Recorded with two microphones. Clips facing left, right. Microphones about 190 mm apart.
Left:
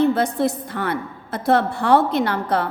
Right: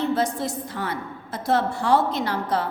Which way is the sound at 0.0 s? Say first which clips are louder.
Left 6 dB; 60° left (ahead or behind).